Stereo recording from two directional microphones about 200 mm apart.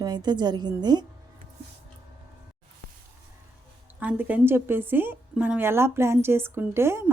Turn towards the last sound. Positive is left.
turn(degrees=-10)  # may be behind; listen again after turning